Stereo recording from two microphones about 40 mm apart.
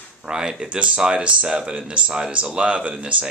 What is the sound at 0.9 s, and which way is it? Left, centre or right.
Speech, right.